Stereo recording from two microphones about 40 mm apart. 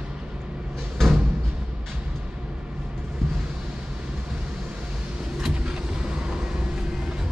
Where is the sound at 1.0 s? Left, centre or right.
Centre.